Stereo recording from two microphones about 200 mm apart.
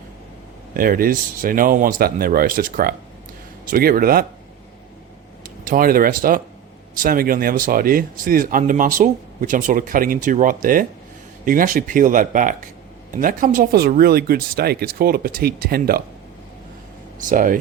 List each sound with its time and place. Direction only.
0.7 s speech: 45° right (ahead or behind)
5.6 s speech: 45° right (ahead or behind)
17.2 s speech: 40° right (ahead or behind)